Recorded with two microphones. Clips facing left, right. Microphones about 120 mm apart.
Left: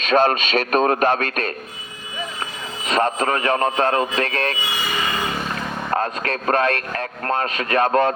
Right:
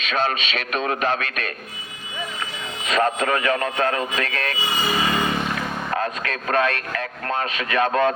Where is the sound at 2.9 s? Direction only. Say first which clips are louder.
Left 1 dB; 35° left (ahead or behind).